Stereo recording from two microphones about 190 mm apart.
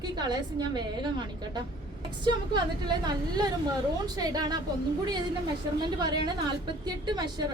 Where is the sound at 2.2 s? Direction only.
20° right (ahead or behind).